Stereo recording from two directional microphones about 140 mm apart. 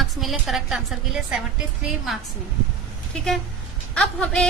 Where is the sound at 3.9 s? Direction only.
5° left (ahead or behind).